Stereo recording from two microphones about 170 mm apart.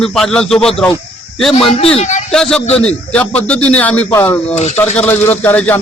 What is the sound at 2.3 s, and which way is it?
A man's voice, 5° left (ahead or behind).